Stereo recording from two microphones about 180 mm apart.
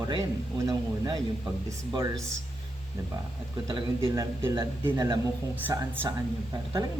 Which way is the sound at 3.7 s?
30° right (ahead or behind).